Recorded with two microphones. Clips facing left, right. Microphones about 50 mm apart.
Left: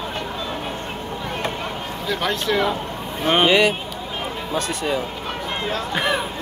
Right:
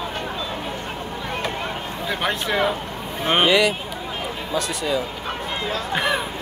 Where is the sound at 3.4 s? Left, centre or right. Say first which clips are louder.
Left 1 dB; left.